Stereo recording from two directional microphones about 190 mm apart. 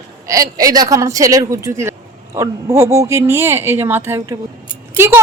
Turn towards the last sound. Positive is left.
turn(degrees=-15)  # may be behind; listen again after turning